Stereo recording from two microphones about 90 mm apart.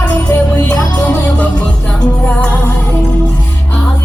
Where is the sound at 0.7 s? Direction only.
20° left (ahead or behind).